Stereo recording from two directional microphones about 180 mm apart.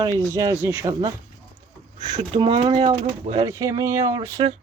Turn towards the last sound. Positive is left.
turn(degrees=-35)  # may be behind; listen again after turning